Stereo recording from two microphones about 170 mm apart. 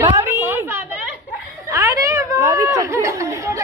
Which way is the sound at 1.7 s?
15° right (ahead or behind).